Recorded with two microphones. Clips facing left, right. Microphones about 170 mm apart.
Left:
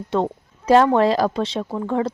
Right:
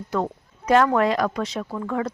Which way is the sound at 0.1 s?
30° left (ahead or behind).